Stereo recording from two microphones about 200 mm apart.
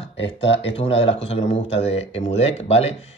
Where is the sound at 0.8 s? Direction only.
30° left (ahead or behind).